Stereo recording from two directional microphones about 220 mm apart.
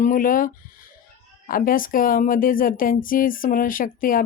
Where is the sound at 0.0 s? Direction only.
35° left (ahead or behind).